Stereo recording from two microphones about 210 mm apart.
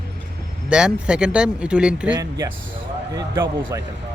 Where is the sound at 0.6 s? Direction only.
5° right (ahead or behind).